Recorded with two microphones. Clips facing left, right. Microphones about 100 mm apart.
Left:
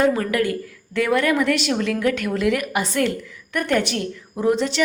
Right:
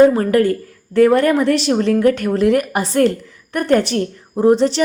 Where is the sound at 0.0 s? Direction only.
35° right (ahead or behind).